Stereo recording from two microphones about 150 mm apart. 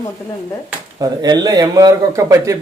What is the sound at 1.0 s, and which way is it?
A man's voice, 25° right (ahead or behind).